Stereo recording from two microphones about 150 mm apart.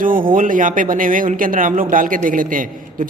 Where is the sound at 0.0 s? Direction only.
65° right (ahead or behind).